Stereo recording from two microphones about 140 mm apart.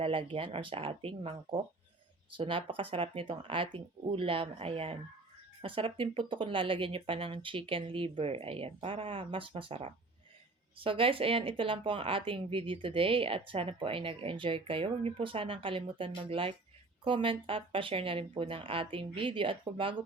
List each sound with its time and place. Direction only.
0.0 s speech: 40° right (ahead or behind)